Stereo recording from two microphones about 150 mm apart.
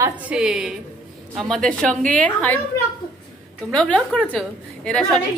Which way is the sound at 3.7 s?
5° left (ahead or behind).